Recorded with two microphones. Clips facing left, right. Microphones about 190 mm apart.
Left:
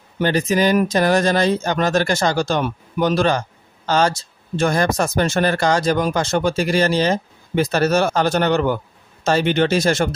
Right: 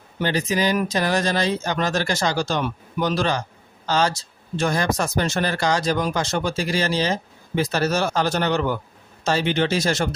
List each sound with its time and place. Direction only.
0.2 s speech: 50° left (ahead or behind)